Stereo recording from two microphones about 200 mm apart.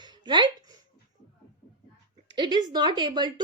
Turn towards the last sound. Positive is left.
turn(degrees=-20)  # may be behind; listen again after turning